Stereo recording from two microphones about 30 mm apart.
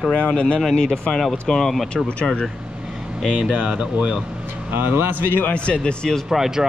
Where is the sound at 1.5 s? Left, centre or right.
Centre.